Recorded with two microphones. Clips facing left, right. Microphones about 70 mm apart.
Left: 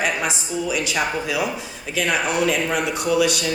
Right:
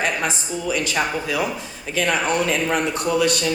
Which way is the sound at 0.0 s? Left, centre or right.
Right.